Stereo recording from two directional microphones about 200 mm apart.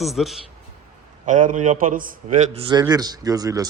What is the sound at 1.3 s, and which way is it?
A man's voice, 40° right (ahead or behind).